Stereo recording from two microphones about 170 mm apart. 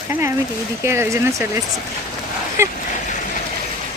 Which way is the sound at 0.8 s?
15° right (ahead or behind).